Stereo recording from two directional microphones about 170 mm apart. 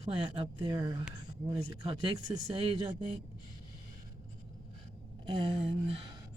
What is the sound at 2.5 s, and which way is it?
Speech, 30° right (ahead or behind).